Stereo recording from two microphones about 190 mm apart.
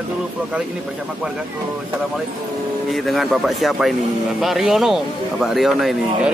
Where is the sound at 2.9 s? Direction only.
Centre (ahead or behind).